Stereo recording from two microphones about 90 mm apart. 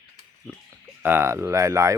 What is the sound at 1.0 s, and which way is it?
Speech, 25° right (ahead or behind).